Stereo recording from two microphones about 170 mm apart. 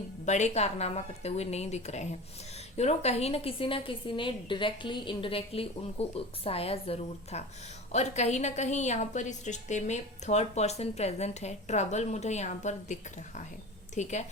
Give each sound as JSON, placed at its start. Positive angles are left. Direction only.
{"t": 0.3, "sound": "a woman's voice", "side_deg": 45}